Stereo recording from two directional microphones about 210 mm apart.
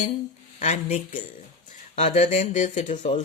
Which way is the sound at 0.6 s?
30° left (ahead or behind).